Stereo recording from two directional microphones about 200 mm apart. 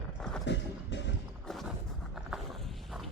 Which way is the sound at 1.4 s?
Centre (ahead or behind).